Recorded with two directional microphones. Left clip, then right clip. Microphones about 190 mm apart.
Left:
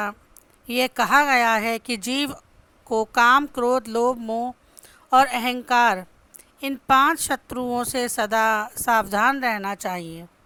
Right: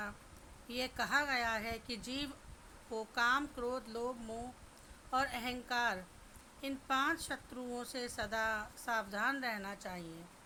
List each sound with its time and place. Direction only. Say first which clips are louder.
0.7 s speech: left 17 dB; 50° left (ahead or behind)